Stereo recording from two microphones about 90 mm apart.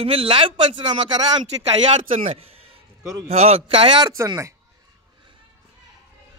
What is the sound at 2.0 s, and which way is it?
Speech, 90° right.